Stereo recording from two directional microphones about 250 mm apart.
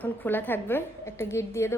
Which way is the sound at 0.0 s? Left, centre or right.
Centre.